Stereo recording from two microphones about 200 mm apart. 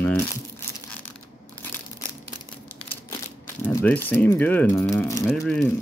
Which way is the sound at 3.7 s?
10° left (ahead or behind).